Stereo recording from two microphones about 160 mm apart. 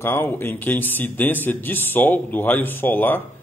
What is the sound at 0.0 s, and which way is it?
Speech, 15° left (ahead or behind).